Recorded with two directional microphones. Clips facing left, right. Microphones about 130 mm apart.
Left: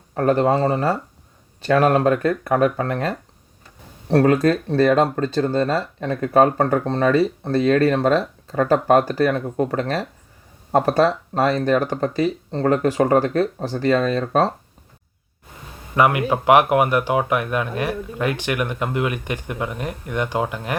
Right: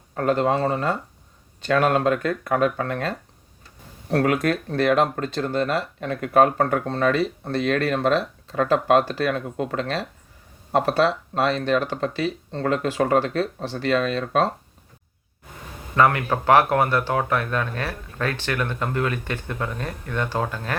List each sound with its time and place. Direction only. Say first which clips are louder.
0.1 s speech: left 3 dB; 25° left (ahead or behind)
2.0 s speech: left 3 dB; 25° left (ahead or behind)
16.0 s speech: left 2 dB; 15° left (ahead or behind)